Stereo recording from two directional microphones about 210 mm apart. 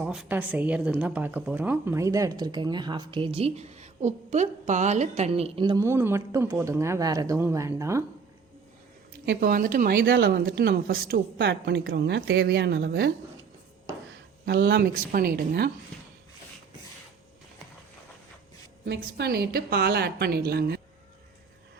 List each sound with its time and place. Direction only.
0.0 s a woman's voice: 5° right (ahead or behind)
9.2 s a woman's voice: 50° right (ahead or behind)
14.4 s a woman's voice: 50° right (ahead or behind)
18.9 s a woman's voice: 50° right (ahead or behind)